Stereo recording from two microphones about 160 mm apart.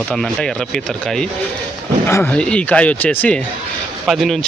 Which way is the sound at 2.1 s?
15° left (ahead or behind).